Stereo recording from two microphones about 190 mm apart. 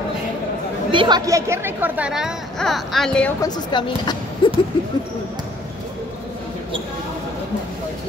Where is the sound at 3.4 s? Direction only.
25° left (ahead or behind).